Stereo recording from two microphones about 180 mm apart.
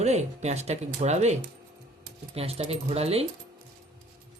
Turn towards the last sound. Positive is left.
turn(degrees=-35)  # may be behind; listen again after turning